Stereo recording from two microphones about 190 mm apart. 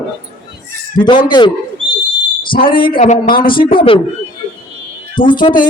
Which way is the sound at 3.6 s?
25° left (ahead or behind).